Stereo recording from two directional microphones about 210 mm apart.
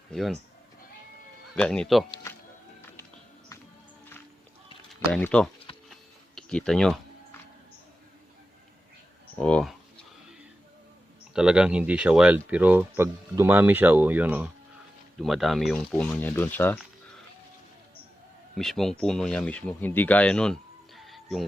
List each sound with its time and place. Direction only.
0.1 s speech: centre (ahead or behind)
1.5 s speech: 5° left (ahead or behind)
2.0 s music: 20° left (ahead or behind)
5.1 s speech: 5° left (ahead or behind)
5.9 s tick-tock: 5° left (ahead or behind)
9.3 s speech: 5° left (ahead or behind)
11.3 s speech: 5° right (ahead or behind)
18.5 s speech: centre (ahead or behind)